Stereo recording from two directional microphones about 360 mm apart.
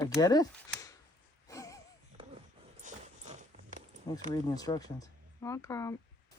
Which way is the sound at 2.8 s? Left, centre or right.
Centre.